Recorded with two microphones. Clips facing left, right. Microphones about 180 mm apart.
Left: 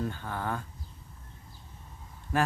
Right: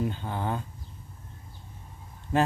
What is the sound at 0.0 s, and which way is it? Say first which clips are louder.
Speech: right 3 dB; 20° right (ahead or behind).